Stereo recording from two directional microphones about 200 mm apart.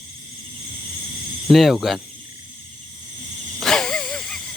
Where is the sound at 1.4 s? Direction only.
Centre (ahead or behind).